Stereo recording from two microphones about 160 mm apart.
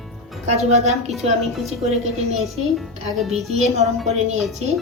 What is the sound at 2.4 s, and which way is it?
A child's voice, centre (ahead or behind).